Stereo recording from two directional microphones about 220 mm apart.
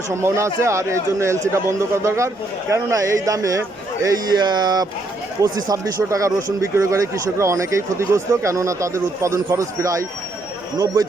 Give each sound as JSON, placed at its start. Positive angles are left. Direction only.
{"t": 0.1, "sound": "speech", "side_deg": -10}